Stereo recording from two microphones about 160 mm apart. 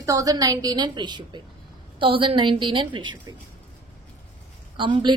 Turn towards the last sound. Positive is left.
turn(degrees=-30)  # may be behind; listen again after turning